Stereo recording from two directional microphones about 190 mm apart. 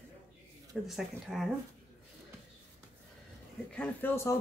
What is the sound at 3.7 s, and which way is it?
Speech, 10° left (ahead or behind).